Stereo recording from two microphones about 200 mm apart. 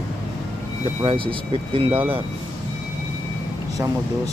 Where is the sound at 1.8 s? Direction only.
25° right (ahead or behind).